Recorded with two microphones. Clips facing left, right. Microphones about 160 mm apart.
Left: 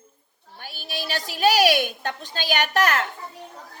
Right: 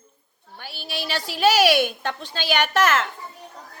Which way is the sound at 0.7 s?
45° left (ahead or behind).